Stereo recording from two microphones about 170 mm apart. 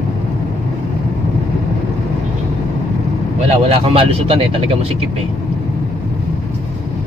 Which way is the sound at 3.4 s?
35° right (ahead or behind).